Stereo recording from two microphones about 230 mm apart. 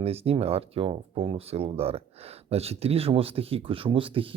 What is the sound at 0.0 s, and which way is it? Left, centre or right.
Speech, right.